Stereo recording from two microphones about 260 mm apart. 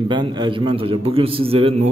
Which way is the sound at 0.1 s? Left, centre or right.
Centre.